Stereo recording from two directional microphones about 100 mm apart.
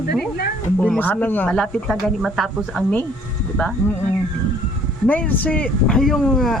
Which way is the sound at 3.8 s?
25° left (ahead or behind).